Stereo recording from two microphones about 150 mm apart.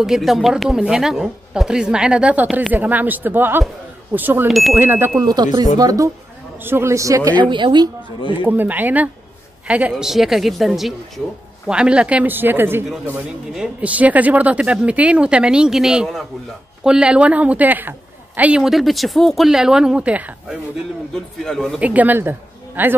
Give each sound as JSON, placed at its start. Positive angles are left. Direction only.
{"t": 0.0, "sound": "a woman's voice", "side_deg": 0}
{"t": 4.5, "sound": "a woman's voice", "side_deg": 0}
{"t": 4.7, "sound": "a woman's voice", "side_deg": -15}
{"t": 8.5, "sound": "a woman's voice", "side_deg": -10}
{"t": 21.1, "sound": "a woman's voice", "side_deg": 0}
{"t": 21.8, "sound": "speech", "side_deg": -10}